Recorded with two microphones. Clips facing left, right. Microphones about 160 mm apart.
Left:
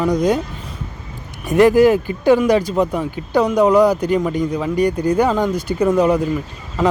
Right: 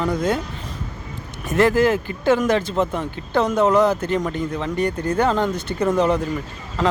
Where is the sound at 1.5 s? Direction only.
15° left (ahead or behind).